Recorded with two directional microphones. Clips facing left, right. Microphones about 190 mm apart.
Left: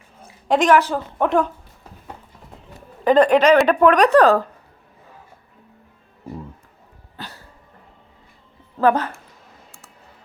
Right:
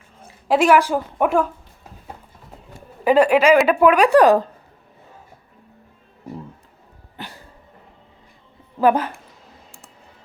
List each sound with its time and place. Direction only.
0.4 s a woman's voice: 5° right (ahead or behind)
3.0 s a woman's voice: 10° right (ahead or behind)
7.2 s cough: 15° right (ahead or behind)
8.8 s a woman's voice: 10° right (ahead or behind)